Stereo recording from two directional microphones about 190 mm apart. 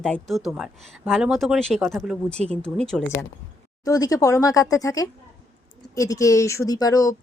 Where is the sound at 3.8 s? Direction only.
20° left (ahead or behind).